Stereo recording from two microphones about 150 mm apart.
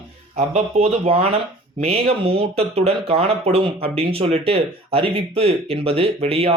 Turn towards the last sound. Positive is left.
turn(degrees=-40)  # may be behind; listen again after turning